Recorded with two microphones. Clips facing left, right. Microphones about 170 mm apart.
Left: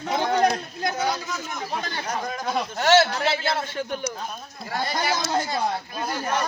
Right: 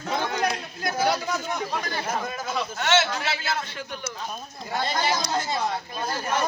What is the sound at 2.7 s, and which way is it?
A man's voice, 35° left (ahead or behind).